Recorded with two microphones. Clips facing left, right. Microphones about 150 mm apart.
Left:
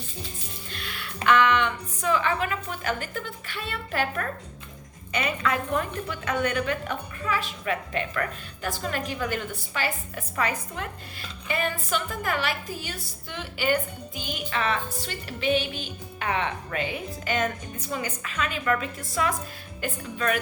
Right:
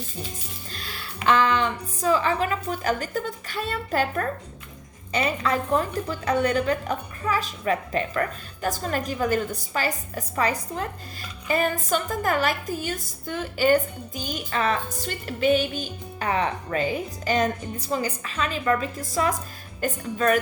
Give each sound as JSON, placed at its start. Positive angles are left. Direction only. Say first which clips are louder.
{"t": 0.7, "sound": "a woman's voice", "louder": "left 1 dB", "side_deg": -35}